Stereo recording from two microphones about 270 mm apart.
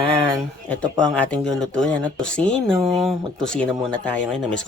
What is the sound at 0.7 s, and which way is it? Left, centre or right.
Speech, centre.